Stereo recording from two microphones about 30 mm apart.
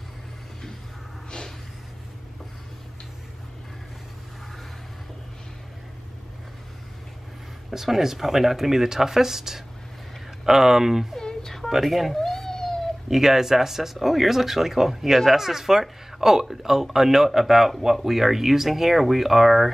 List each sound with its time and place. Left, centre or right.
7.7 s speech: centre
11.1 s a sound: centre
11.8 s speech: centre
12.3 s cat: centre
13.1 s speech: centre